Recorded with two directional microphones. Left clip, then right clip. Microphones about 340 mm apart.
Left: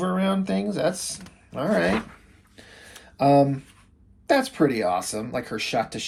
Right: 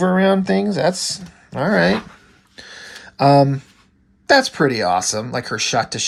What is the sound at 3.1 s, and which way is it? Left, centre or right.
Speech, right.